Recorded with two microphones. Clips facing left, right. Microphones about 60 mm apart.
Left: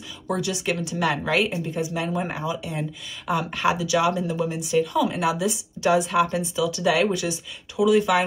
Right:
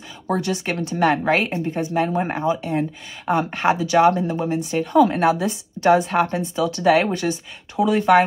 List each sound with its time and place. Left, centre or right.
0.3 s a woman's voice: right
2.0 s speech: right
2.3 s a woman's voice: right